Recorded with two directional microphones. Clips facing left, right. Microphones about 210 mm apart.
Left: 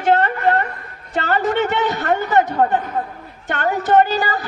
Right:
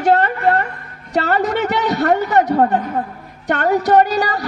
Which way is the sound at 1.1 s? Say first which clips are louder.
Right 2 dB; 40° right (ahead or behind).